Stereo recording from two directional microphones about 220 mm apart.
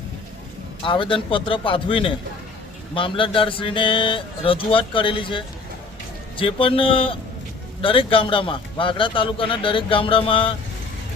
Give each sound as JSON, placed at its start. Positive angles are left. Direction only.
{"t": 0.8, "sound": "a man's voice", "side_deg": 25}
{"t": 6.4, "sound": "a man's voice", "side_deg": 25}